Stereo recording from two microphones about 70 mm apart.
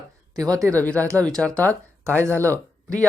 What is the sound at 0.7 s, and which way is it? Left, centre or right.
Speech, centre.